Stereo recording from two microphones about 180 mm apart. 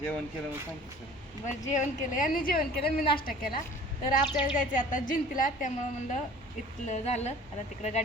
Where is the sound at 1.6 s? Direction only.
45° left (ahead or behind).